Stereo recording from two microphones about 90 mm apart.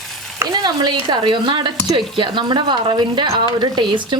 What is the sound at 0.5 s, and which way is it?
Speech, 50° right (ahead or behind).